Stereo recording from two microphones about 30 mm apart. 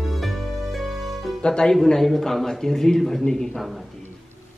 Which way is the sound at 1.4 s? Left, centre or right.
Left.